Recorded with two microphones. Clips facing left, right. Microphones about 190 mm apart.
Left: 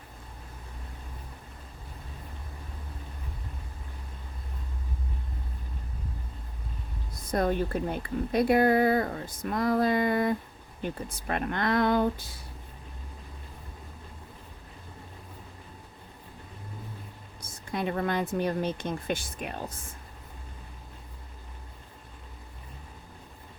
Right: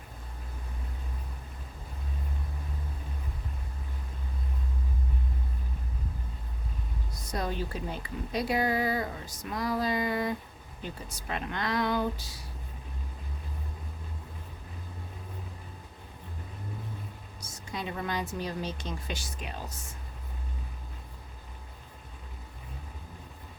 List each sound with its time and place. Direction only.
7.2 s a woman's voice: 55° left (ahead or behind)
17.4 s a woman's voice: 55° left (ahead or behind)